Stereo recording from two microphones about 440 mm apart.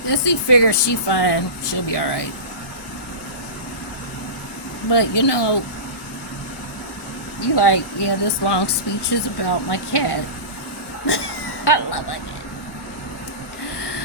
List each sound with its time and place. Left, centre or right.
0.1 s speech: left
4.9 s speech: left
7.4 s speech: left
11.0 s a sound: left